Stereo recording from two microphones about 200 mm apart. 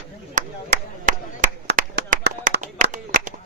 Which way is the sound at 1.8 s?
50° right (ahead or behind).